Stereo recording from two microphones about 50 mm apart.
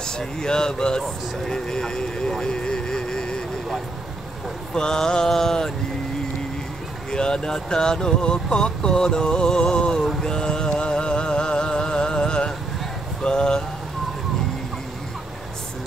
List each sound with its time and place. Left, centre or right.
0.0 s speech: centre
4.7 s speech: centre
7.1 s speech: centre
10.2 s music: centre
13.2 s a sound: centre